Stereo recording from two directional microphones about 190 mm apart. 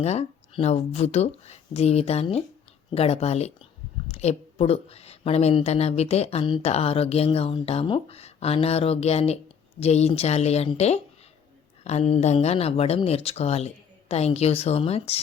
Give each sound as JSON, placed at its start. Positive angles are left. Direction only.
{"t": 0.0, "sound": "a woman's voice", "side_deg": 35}